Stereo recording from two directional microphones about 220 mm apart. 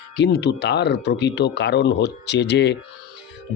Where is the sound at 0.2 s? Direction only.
50° left (ahead or behind).